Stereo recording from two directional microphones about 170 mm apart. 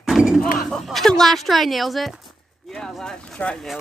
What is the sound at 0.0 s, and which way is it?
Artillery fire, 5° right (ahead or behind).